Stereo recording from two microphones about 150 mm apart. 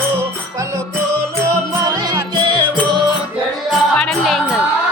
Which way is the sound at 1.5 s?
25° right (ahead or behind).